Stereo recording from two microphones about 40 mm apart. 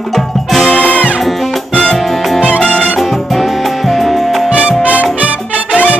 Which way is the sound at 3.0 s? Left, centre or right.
Centre.